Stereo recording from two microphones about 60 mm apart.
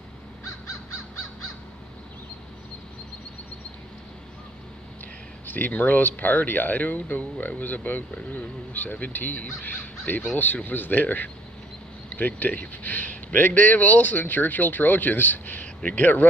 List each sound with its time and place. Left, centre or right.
5.5 s a man's voice: left